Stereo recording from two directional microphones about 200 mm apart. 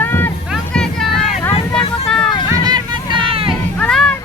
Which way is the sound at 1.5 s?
30° left (ahead or behind).